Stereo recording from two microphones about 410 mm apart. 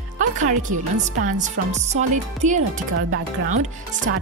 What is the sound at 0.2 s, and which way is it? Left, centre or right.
Speech, centre.